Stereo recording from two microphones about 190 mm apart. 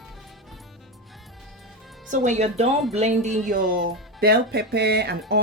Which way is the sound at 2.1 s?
40° right (ahead or behind).